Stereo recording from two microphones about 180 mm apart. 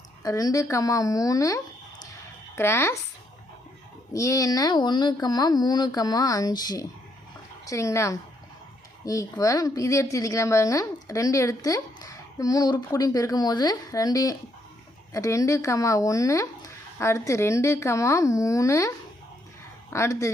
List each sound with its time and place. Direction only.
0.2 s a woman's voice: 20° left (ahead or behind)
4.1 s a woman's voice: 15° left (ahead or behind)